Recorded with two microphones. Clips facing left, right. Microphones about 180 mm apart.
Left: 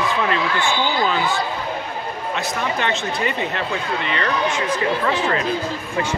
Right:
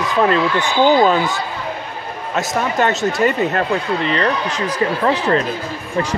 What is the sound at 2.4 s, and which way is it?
Speech, 45° right (ahead or behind).